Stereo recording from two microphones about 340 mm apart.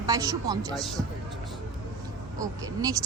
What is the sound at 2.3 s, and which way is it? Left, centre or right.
Speech, centre.